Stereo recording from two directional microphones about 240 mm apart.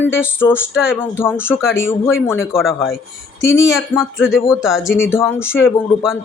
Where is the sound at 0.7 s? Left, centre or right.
Centre.